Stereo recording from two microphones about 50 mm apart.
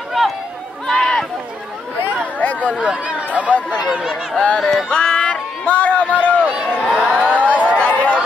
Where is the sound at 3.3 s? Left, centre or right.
Right.